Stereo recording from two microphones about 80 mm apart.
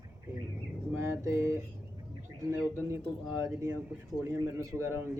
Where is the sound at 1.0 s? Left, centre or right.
Right.